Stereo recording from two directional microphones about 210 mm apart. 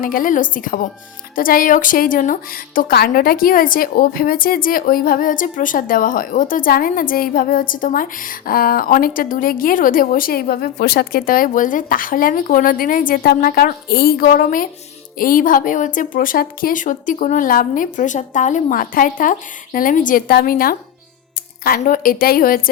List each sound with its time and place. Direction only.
0.0 s a woman's voice: 40° left (ahead or behind)